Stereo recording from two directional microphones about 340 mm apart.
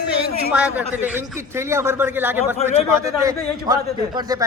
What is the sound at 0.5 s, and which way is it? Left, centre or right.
A man's voice, centre.